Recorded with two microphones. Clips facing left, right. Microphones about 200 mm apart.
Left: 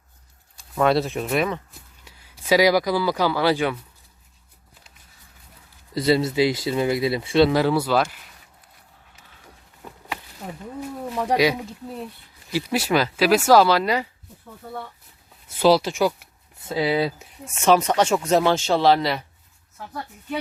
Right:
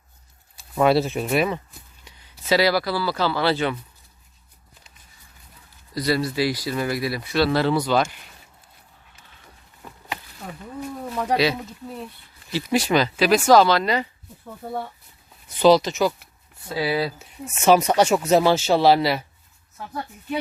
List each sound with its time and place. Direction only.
0.5 s speech: 5° right (ahead or behind); by 3.8 s 10° left (ahead or behind)
5.9 s speech: 25° left (ahead or behind); by 8.0 s 5° left (ahead or behind)
10.8 s speech: 10° left (ahead or behind)
15.4 s speech: 5° left (ahead or behind)
17.5 s speech: 5° right (ahead or behind)